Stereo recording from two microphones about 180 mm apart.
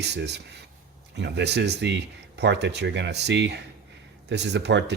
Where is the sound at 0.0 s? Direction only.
70° right (ahead or behind).